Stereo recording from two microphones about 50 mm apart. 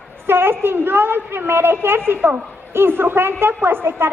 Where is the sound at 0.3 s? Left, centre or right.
Right.